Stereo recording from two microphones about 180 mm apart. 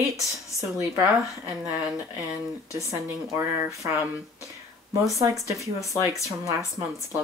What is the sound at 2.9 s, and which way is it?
Speech, 15° right (ahead or behind).